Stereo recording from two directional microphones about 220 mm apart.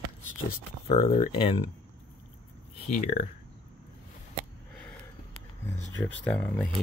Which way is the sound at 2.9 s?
35° left (ahead or behind).